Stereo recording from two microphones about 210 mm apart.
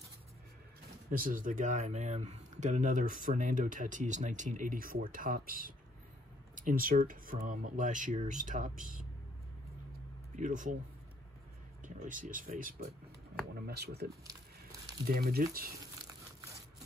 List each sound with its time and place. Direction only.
1.1 s speech: 40° right (ahead or behind)
10.3 s speech: 40° right (ahead or behind)
11.8 s speech: 40° right (ahead or behind)